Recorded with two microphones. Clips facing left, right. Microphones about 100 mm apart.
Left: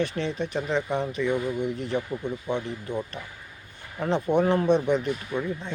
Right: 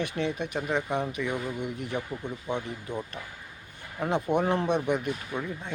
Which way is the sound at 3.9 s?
10° right (ahead or behind).